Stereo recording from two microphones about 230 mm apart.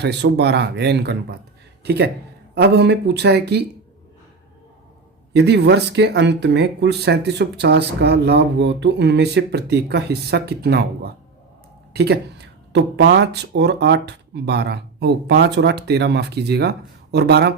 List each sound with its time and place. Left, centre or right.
0.0 s speech: right
5.3 s speech: right